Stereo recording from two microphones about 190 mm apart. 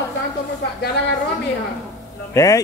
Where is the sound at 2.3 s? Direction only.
20° left (ahead or behind).